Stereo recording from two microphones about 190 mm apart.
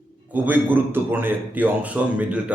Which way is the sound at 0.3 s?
10° right (ahead or behind).